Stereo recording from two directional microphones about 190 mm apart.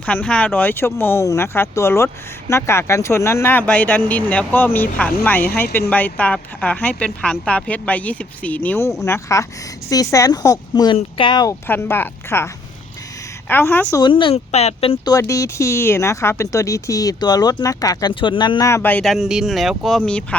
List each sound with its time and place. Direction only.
0.0 s speech: 5° left (ahead or behind); by 11.5 s 25° left (ahead or behind)
11.7 s speech: 10° left (ahead or behind)
13.5 s speech: 10° left (ahead or behind)
14.0 s speech: 25° left (ahead or behind)
15.1 s speech: 15° left (ahead or behind); by 20.0 s centre (ahead or behind)